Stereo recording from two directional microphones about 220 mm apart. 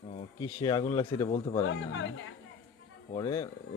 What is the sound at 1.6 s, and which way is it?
Speech, 60° left (ahead or behind).